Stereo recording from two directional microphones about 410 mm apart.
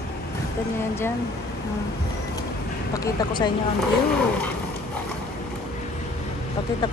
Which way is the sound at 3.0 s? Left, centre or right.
Centre.